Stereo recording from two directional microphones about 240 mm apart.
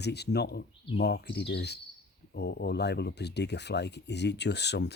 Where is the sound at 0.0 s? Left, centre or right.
Left.